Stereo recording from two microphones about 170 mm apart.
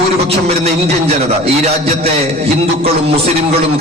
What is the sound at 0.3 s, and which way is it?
Speech, 35° right (ahead or behind).